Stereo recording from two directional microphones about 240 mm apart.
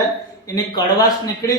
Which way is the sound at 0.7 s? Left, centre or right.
Centre.